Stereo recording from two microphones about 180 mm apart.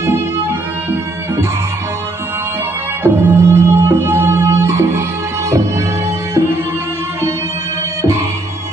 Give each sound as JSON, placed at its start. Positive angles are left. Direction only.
{"t": 0.0, "sound": "music", "side_deg": -15}
{"t": 3.0, "sound": "music", "side_deg": -10}